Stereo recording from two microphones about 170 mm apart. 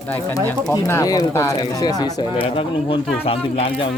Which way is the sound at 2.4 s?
35° left (ahead or behind).